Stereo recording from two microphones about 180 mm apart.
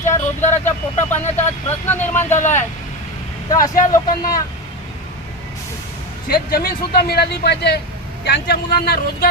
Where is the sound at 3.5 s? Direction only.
20° left (ahead or behind).